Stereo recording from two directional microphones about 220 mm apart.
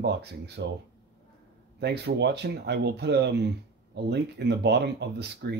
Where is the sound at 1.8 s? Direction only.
50° right (ahead or behind).